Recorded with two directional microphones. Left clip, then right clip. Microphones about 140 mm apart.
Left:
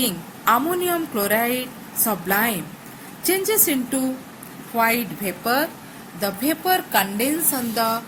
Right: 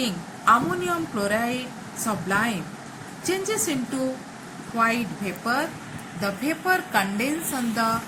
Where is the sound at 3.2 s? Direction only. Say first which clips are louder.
Left 5 dB; 70° left (ahead or behind).